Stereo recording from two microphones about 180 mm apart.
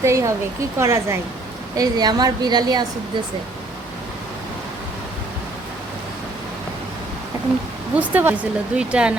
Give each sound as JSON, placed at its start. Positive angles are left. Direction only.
{"t": 0.0, "sound": "a woman's voice", "side_deg": -15}
{"t": 7.9, "sound": "speech", "side_deg": -10}